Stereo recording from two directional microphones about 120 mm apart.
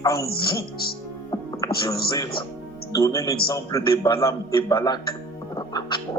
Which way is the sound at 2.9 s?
25° left (ahead or behind).